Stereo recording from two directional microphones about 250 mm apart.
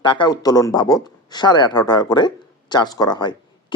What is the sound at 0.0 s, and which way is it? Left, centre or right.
Speech, centre.